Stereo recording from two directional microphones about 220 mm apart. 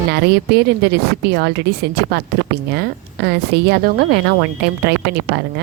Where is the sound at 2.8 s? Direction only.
50° right (ahead or behind).